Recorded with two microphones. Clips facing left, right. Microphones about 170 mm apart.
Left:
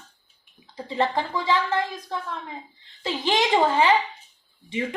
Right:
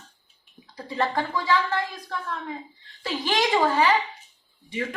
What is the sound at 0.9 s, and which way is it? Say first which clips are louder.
A woman's voice: left 1 dB; 20° left (ahead or behind).